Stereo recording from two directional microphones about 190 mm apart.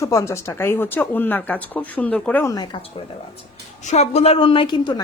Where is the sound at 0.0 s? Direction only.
15° left (ahead or behind).